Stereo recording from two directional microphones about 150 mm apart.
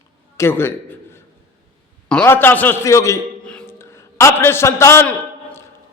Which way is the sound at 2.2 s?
15° left (ahead or behind).